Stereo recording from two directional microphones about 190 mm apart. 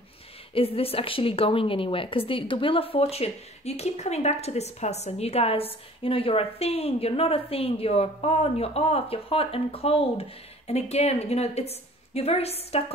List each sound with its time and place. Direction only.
0.6 s a woman's voice: 30° left (ahead or behind)